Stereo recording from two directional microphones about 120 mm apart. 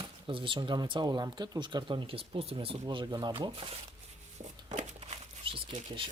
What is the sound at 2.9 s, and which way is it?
Speech, 35° right (ahead or behind).